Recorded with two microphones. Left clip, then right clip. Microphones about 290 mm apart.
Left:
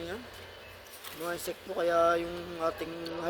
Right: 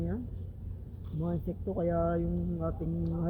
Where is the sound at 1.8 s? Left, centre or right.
Centre.